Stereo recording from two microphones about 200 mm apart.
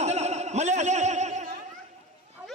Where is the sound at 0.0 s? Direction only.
35° right (ahead or behind).